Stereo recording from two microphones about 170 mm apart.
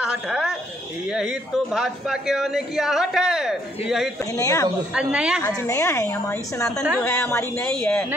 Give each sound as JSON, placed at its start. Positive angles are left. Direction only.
{"t": 0.0, "sound": "speech", "side_deg": -5}
{"t": 4.2, "sound": "speech", "side_deg": 20}
{"t": 4.9, "sound": "speech", "side_deg": -5}
{"t": 5.6, "sound": "speech", "side_deg": 15}